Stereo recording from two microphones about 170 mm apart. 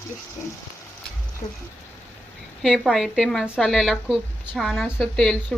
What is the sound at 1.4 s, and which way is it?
Speech, 45° left (ahead or behind).